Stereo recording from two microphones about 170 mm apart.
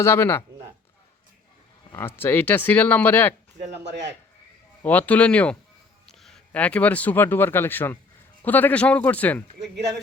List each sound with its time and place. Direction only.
0.0 s speech: 15° left (ahead or behind)
1.9 s speech: 15° left (ahead or behind)
3.7 s speech: 90° right
4.8 s speech: 10° left (ahead or behind)